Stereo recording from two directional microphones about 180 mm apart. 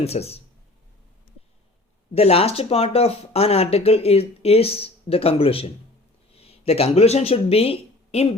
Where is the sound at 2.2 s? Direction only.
35° left (ahead or behind).